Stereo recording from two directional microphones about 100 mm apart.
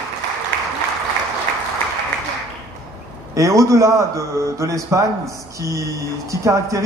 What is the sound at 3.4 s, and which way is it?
A man's voice, 30° right (ahead or behind).